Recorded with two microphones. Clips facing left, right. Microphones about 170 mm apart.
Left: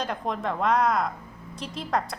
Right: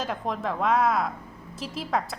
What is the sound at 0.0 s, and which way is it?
A woman's voice, centre (ahead or behind).